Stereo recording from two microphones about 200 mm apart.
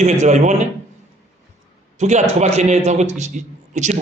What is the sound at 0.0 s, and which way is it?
Speech, 35° right (ahead or behind).